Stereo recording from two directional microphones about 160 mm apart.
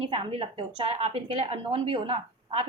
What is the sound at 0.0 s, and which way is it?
A woman's voice, 35° right (ahead or behind).